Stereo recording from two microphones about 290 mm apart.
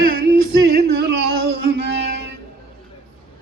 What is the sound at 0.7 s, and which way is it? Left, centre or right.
Music, right.